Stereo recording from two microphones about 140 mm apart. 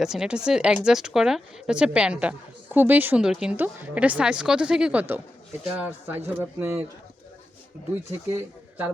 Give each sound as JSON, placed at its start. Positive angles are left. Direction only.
{"t": 0.0, "sound": "speech", "side_deg": -5}